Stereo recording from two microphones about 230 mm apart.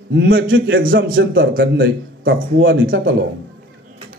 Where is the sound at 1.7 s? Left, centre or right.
Right.